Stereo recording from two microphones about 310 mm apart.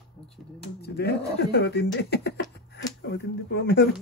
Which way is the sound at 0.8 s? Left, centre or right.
Left.